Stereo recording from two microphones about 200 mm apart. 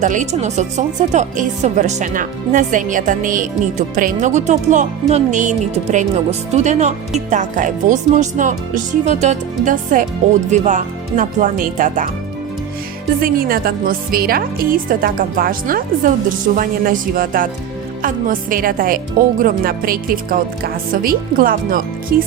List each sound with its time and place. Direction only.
0.0 s speech: 40° right (ahead or behind)
13.2 s a woman's voice: 45° right (ahead or behind)